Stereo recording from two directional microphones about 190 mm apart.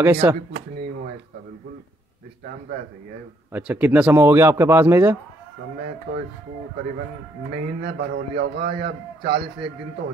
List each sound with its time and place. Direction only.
0.0 s speech: 10° right (ahead or behind)
3.5 s speech: 10° right (ahead or behind)
6.1 s a man's voice: 55° right (ahead or behind)
7.8 s a man's voice: 55° right (ahead or behind)